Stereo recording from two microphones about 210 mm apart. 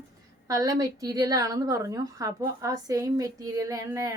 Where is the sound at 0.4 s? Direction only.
15° right (ahead or behind).